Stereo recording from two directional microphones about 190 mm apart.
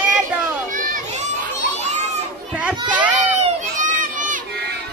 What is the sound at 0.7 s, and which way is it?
Children playing, 45° right (ahead or behind).